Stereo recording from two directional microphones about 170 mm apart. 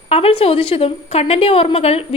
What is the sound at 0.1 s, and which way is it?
A woman's voice, 35° left (ahead or behind).